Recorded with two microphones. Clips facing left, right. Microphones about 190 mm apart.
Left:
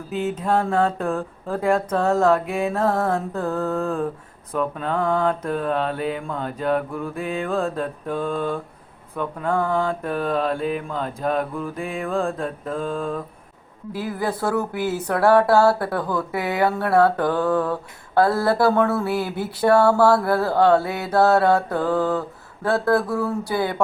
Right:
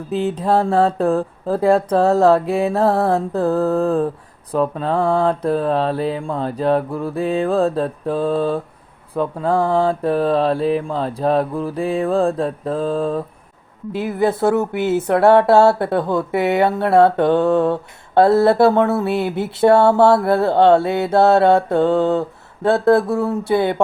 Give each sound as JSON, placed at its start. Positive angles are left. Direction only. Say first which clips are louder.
{"t": 0.1, "sound": "mantra", "louder": "right 4 dB", "side_deg": -35}
{"t": 13.9, "sound": "speech", "louder": "right 7 dB", "side_deg": -25}